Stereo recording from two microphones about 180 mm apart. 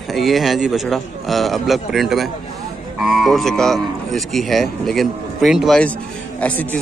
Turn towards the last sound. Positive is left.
turn(degrees=10)  # may be behind; listen again after turning